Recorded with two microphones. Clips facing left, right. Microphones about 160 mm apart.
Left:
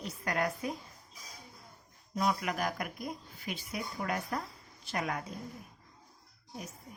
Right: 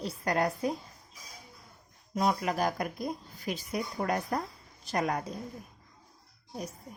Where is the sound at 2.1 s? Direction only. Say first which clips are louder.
Right 3 dB; 30° right (ahead or behind).